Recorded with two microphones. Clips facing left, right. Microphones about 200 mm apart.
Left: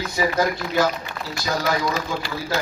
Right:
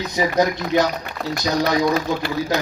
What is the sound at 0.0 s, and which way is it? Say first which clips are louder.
Speech: right 3 dB; 20° right (ahead or behind).